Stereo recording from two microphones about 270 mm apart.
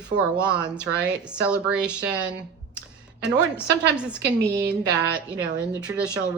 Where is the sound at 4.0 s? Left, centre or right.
Centre.